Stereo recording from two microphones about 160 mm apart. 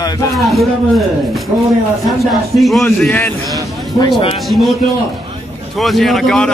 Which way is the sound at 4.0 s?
30° left (ahead or behind).